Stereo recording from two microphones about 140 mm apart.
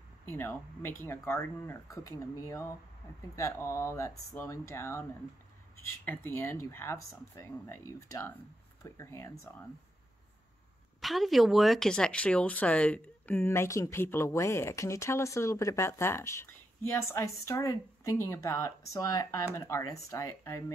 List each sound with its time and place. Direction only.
0.2 s speech: 15° left (ahead or behind)
6.0 s speech: 15° left (ahead or behind)
11.0 s speech: centre (ahead or behind); by 20.6 s 20° left (ahead or behind)